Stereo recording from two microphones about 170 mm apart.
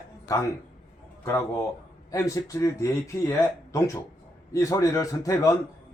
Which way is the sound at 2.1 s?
20° left (ahead or behind).